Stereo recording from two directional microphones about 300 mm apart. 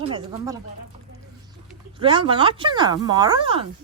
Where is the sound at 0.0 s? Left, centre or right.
Centre.